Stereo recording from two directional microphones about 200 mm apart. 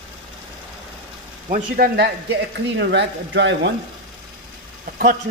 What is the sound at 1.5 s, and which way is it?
Speech, 55° right (ahead or behind).